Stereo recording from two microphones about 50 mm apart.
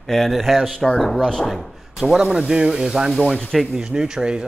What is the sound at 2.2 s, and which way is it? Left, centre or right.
Speech, centre.